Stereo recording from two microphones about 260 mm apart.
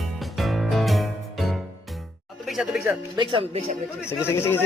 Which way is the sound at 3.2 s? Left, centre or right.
Right.